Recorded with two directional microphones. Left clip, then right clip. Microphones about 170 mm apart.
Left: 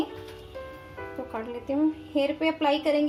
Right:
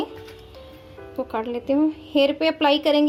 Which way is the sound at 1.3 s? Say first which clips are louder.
Right 7 dB; 60° right (ahead or behind).